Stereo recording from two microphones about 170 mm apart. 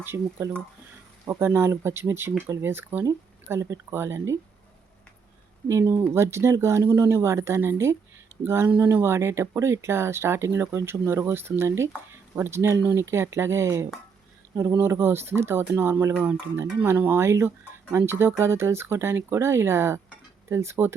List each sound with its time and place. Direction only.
0.0 s speech: 15° right (ahead or behind)
5.6 s speech: 15° right (ahead or behind)